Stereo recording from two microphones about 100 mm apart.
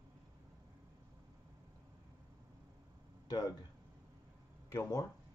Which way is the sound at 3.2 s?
45° left (ahead or behind).